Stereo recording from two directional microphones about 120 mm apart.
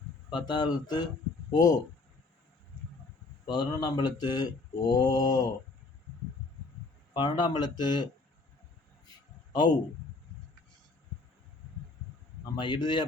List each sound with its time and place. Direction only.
0.3 s speech: 40° left (ahead or behind)
3.4 s speech: 35° left (ahead or behind)
7.1 s speech: 40° left (ahead or behind)
9.0 s a sound: 40° left (ahead or behind)
12.5 s speech: 40° left (ahead or behind)